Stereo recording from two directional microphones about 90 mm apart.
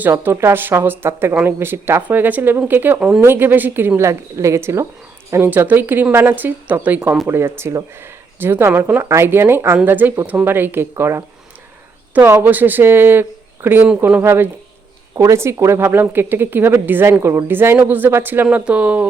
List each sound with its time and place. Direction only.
0.2 s speech: 25° right (ahead or behind)
5.5 s speech: 20° right (ahead or behind)